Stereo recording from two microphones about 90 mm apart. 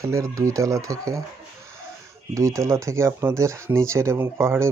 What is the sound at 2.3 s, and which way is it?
Speech, 35° right (ahead or behind).